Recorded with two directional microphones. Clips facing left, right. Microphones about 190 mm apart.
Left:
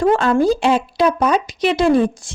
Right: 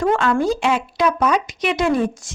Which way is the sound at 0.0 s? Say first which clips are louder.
Left 3 dB; 35° left (ahead or behind).